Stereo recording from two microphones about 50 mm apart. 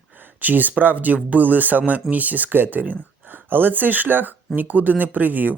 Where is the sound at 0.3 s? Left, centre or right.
Right.